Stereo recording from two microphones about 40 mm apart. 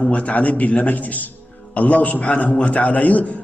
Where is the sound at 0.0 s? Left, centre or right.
Left.